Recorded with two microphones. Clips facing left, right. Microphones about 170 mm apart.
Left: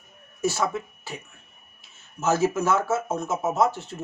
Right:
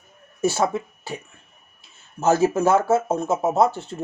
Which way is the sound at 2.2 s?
30° right (ahead or behind).